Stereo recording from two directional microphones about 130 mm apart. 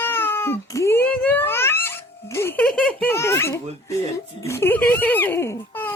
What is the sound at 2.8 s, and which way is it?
A child's voice, 10° left (ahead or behind).